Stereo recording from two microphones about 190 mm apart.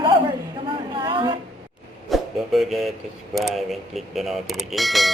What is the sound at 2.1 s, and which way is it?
Speech, centre (ahead or behind).